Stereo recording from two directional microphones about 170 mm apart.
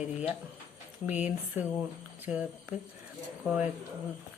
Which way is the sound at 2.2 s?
5° right (ahead or behind).